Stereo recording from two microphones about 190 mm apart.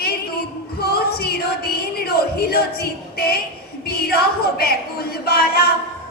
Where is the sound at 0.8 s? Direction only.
55° left (ahead or behind).